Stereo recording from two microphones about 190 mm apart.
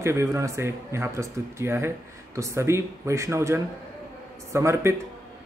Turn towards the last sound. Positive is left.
turn(degrees=-15)  # may be behind; listen again after turning